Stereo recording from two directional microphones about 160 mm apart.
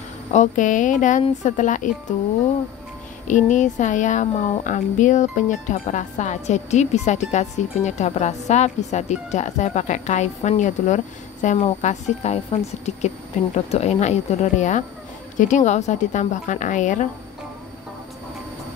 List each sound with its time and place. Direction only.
0.3 s a woman's voice: 50° left (ahead or behind)
3.3 s a woman's voice: 50° left (ahead or behind)